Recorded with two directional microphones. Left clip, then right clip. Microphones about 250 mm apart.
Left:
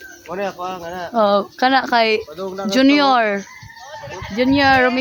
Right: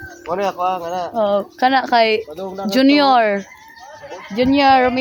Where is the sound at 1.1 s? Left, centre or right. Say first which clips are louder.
Left 3 dB; left.